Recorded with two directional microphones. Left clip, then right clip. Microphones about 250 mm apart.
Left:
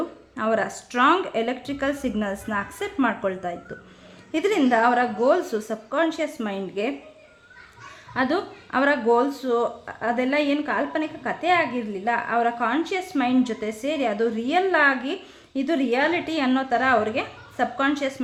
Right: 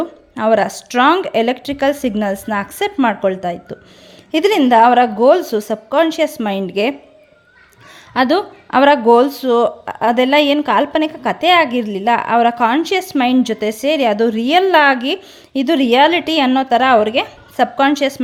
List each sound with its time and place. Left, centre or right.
0.3 s speech: right
8.1 s speech: right